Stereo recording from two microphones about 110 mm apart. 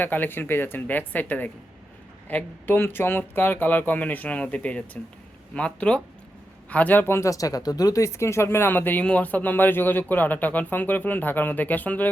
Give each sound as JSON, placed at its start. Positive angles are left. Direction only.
{"t": 0.0, "sound": "speech", "side_deg": 15}